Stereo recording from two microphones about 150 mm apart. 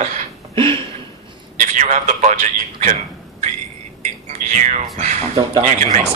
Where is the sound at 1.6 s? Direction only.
55° right (ahead or behind).